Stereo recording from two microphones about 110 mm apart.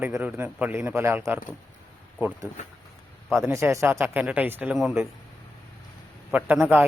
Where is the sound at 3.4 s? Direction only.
25° right (ahead or behind).